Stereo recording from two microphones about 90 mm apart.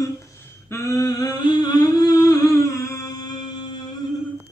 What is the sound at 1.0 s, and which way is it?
Humming, 45° left (ahead or behind).